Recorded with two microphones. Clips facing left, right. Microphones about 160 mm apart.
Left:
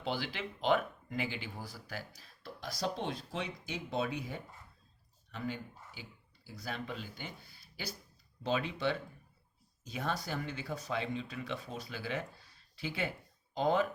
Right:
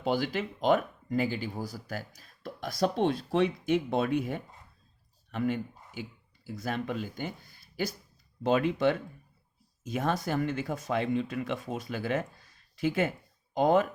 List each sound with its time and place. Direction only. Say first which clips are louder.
0.0 s speech: right 8 dB; 45° right (ahead or behind)
8.4 s speech: right 8 dB; 50° right (ahead or behind)